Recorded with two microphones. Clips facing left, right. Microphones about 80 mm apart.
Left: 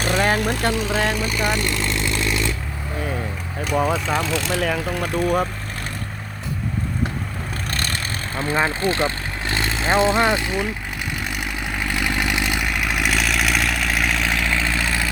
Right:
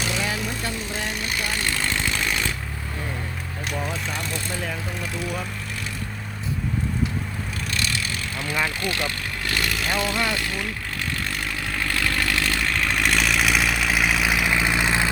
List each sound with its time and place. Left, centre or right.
0.0 s vehicle: left
3.8 s speech: left
7.7 s vehicle: left; by 15.1 s right